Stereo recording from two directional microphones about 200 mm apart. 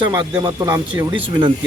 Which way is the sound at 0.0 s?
25° right (ahead or behind).